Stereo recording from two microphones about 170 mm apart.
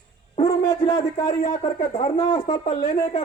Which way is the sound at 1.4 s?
45° left (ahead or behind).